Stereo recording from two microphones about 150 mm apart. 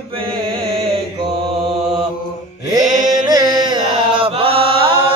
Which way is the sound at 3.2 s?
25° right (ahead or behind).